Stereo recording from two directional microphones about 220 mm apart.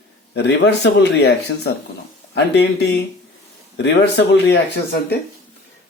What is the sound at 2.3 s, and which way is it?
Speech, 50° left (ahead or behind).